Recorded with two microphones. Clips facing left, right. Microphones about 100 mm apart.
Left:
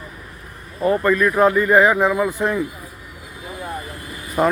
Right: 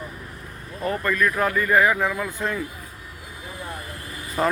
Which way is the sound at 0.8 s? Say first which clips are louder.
Left 7 dB; 25° left (ahead or behind).